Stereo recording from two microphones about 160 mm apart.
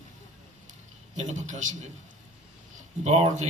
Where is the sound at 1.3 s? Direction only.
50° right (ahead or behind).